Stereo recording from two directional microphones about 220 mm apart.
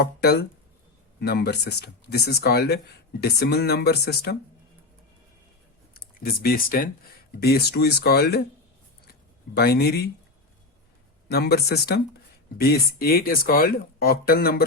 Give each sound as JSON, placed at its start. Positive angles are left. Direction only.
{"t": 0.0, "sound": "speech", "side_deg": 45}
{"t": 5.9, "sound": "speech", "side_deg": 45}
{"t": 9.6, "sound": "speech", "side_deg": 45}
{"t": 11.3, "sound": "speech", "side_deg": 45}